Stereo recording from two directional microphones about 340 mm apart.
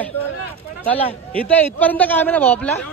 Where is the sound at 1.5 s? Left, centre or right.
Centre.